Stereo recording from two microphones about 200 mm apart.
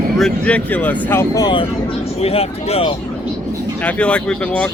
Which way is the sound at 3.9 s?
5° left (ahead or behind).